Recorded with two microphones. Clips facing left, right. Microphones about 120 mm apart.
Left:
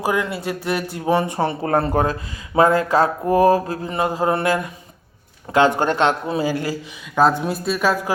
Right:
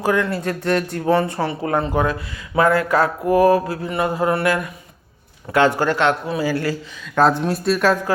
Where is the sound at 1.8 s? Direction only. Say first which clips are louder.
Left 2 dB; 45° left (ahead or behind).